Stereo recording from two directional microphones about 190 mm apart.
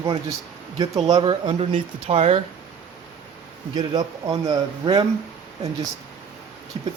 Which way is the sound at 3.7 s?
20° right (ahead or behind).